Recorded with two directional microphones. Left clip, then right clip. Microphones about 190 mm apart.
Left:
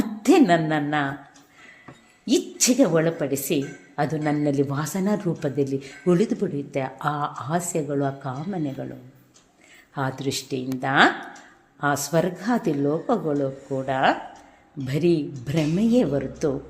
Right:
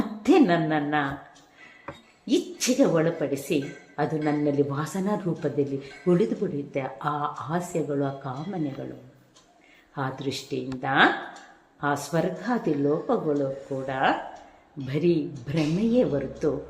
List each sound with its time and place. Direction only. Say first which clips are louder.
0.2 s speech: left 3 dB; 30° left (ahead or behind)
2.2 s speech: left 4 dB; 35° left (ahead or behind)
9.9 s speech: left 3 dB; 35° left (ahead or behind)